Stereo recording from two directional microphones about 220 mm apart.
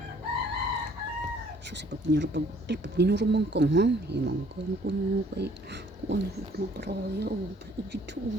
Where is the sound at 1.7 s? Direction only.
50° right (ahead or behind).